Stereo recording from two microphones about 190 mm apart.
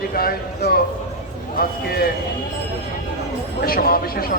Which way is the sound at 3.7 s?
50° left (ahead or behind).